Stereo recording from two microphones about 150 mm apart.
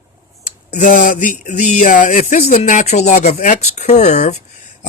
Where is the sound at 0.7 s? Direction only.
60° left (ahead or behind).